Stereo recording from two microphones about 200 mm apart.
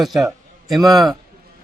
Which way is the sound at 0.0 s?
Centre (ahead or behind).